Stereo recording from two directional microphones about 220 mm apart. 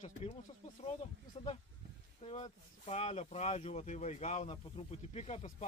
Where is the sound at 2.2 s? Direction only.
30° left (ahead or behind).